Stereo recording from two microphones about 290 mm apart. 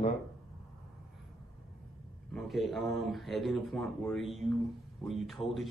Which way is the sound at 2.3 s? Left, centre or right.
Centre.